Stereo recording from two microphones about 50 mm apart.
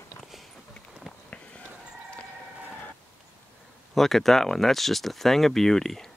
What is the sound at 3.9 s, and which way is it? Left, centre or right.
Speech, centre.